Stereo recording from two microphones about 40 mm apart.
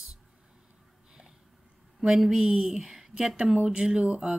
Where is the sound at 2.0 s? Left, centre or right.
Centre.